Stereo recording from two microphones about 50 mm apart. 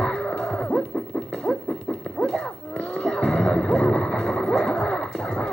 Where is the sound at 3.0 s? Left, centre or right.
Centre.